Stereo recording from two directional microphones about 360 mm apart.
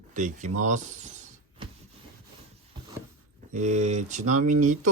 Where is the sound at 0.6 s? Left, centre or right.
Centre.